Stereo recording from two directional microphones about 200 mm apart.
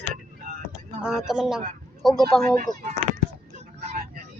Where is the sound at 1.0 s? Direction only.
5° right (ahead or behind).